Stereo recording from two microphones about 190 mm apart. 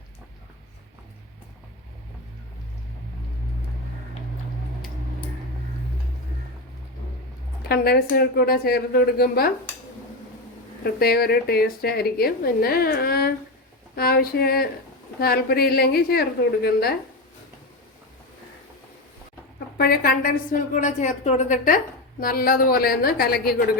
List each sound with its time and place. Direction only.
7.7 s a woman's voice: 55° left (ahead or behind)
10.8 s a woman's voice: 55° left (ahead or behind)
19.5 s a woman's voice: 55° left (ahead or behind)